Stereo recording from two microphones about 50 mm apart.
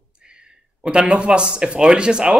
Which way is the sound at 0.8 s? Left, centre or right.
Right.